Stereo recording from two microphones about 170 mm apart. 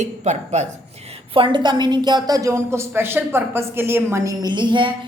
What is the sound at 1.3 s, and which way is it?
A woman's voice, 30° right (ahead or behind).